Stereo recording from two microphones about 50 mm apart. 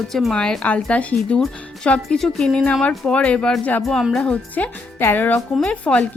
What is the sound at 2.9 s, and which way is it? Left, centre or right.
Speech, left.